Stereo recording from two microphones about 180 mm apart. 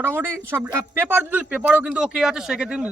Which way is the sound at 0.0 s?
10° right (ahead or behind).